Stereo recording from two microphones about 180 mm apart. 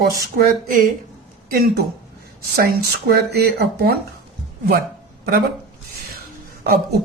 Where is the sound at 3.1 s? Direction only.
60° right (ahead or behind).